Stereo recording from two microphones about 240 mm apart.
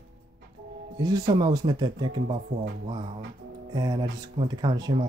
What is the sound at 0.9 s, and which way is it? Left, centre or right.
Speech, centre.